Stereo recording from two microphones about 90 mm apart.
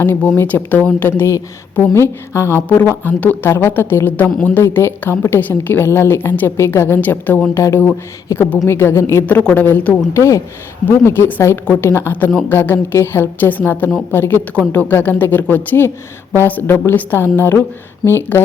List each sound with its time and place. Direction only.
0.0 s a woman's voice: 25° left (ahead or behind)
9.4 s a woman's voice: 20° left (ahead or behind)
10.2 s a woman's voice: 35° left (ahead or behind)